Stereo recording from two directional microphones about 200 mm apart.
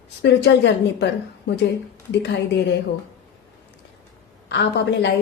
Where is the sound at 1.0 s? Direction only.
60° left (ahead or behind).